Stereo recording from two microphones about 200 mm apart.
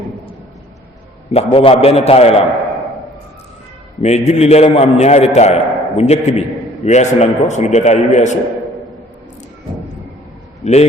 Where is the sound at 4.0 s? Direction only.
35° left (ahead or behind).